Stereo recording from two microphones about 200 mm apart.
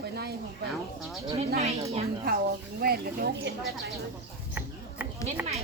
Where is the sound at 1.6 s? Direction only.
30° right (ahead or behind).